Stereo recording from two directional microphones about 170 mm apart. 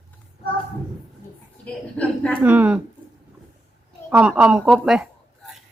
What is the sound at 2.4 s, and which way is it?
Speech, 10° right (ahead or behind).